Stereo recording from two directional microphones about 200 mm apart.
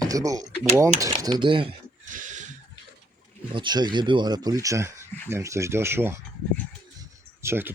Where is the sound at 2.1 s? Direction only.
40° right (ahead or behind).